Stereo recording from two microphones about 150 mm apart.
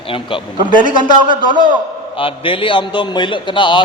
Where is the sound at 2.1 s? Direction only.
35° left (ahead or behind).